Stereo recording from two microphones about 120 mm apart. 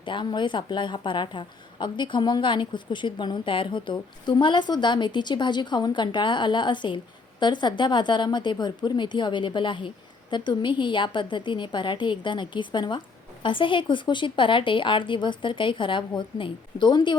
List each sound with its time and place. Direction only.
0.0 s a woman's voice: 40° left (ahead or behind)